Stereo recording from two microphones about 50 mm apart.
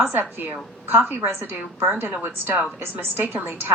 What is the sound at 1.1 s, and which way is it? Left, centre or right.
Speech, right.